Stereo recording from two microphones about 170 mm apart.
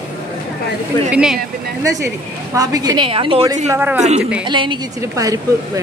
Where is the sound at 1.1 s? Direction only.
5° right (ahead or behind).